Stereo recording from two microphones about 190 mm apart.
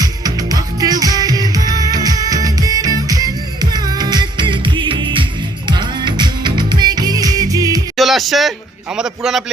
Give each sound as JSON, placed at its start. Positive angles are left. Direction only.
{"t": 0.0, "sound": "music", "side_deg": -20}
{"t": 7.9, "sound": "music", "side_deg": 0}
{"t": 9.0, "sound": "a man's voice", "side_deg": -5}